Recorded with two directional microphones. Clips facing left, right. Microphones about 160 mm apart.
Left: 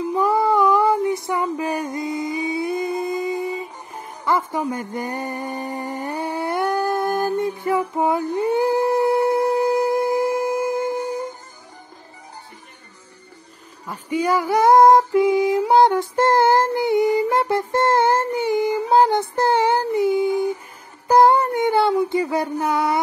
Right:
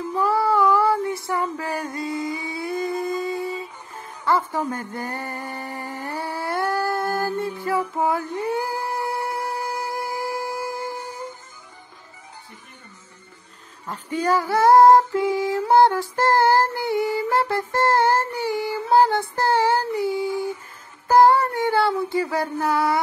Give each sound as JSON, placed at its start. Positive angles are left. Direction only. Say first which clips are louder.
{"t": 0.1, "sound": "female singing", "louder": "left 2 dB", "side_deg": 20}
{"t": 13.8, "sound": "female singing", "louder": "left 2 dB", "side_deg": 10}
{"t": 21.1, "sound": "a sound", "louder": "left 1 dB", "side_deg": 20}